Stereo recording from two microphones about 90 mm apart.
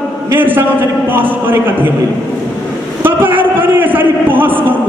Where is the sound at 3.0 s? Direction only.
20° right (ahead or behind).